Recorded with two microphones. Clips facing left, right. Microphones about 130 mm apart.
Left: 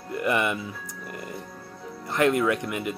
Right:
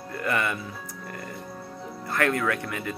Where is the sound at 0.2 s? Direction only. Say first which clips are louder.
Left 2 dB; 15° left (ahead or behind).